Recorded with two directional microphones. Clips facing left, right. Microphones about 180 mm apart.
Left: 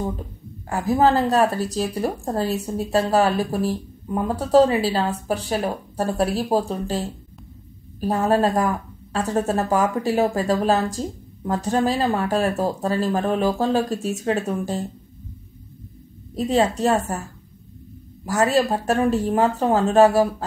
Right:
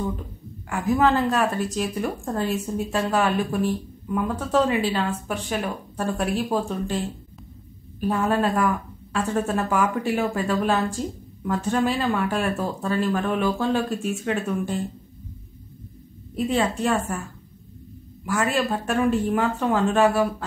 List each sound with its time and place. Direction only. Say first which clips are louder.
0.7 s a woman's voice: left 2 dB; 35° left (ahead or behind)
16.3 s a woman's voice: left 3 dB; 40° left (ahead or behind)
18.2 s a woman's voice: left 4 dB; 40° left (ahead or behind)